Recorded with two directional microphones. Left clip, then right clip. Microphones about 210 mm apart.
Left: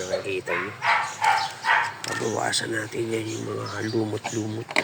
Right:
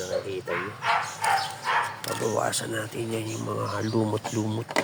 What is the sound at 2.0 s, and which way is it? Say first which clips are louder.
Speech: even; 20° right (ahead or behind).